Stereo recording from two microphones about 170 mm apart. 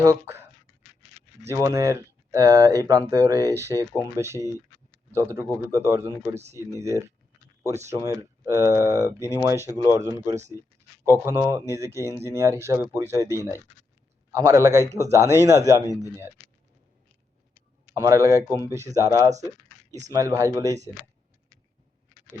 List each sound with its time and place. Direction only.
0.0 s speech: 15° right (ahead or behind)
1.5 s speech: 15° right (ahead or behind)
10.5 s speech: 20° left (ahead or behind)
11.0 s speech: 20° right (ahead or behind)
17.9 s speech: 20° right (ahead or behind)
18.4 s speech: 20° left (ahead or behind)
18.7 s speech: 15° right (ahead or behind)